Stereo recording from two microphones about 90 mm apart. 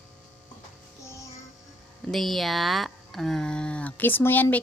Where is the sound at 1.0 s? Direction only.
35° left (ahead or behind).